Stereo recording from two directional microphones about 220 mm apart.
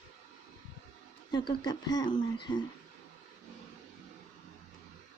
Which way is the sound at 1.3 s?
20° left (ahead or behind).